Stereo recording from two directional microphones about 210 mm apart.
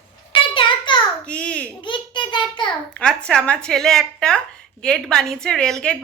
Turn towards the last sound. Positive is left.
turn(degrees=5)  # may be behind; listen again after turning